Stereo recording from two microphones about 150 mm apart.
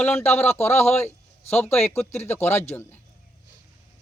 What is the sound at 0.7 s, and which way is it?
Speech, 45° left (ahead or behind).